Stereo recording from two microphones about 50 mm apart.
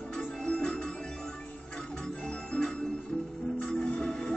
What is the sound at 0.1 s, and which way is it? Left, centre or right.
Music, centre.